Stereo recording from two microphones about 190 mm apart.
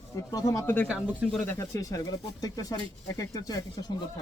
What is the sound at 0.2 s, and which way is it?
Speech, 20° left (ahead or behind).